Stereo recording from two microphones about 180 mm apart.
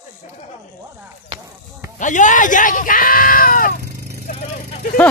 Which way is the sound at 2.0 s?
45° left (ahead or behind).